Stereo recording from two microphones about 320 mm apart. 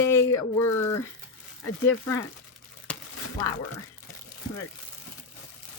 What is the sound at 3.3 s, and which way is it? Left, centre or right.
Speech, centre.